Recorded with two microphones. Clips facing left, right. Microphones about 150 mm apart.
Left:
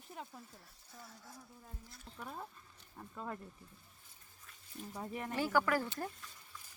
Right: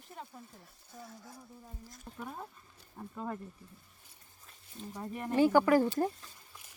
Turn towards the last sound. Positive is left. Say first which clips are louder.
# right 11 dB
turn(degrees=-30)  # may be behind; listen again after turning